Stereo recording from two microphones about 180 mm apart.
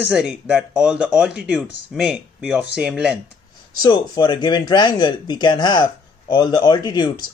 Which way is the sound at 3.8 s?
25° left (ahead or behind).